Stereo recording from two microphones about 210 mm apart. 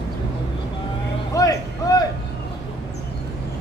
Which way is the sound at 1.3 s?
15° left (ahead or behind).